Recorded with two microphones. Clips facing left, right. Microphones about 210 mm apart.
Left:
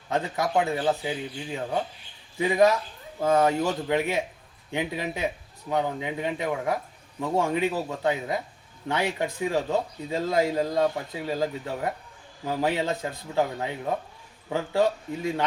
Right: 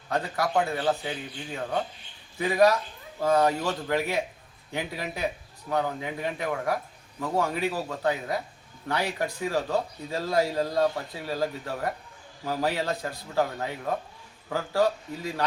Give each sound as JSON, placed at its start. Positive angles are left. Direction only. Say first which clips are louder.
{"t": 0.1, "sound": "speech", "louder": "left 1 dB", "side_deg": 20}
{"t": 2.4, "sound": "speech", "louder": "left 1 dB", "side_deg": 20}